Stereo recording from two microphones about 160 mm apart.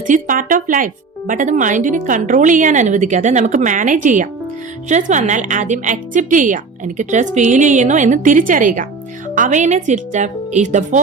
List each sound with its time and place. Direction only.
0.1 s speech: 55° right (ahead or behind)